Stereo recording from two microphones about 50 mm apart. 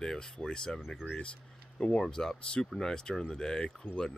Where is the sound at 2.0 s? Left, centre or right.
Centre.